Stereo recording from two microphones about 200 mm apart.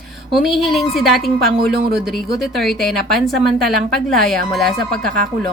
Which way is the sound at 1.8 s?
50° right (ahead or behind).